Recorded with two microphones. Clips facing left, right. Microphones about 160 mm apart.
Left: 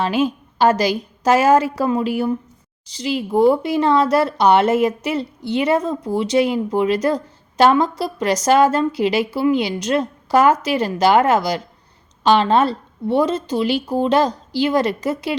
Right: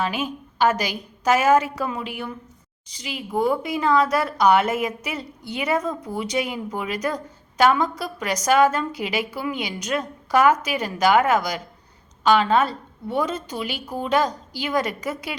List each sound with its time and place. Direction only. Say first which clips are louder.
0.6 s speech: left 5 dB; 35° left (ahead or behind)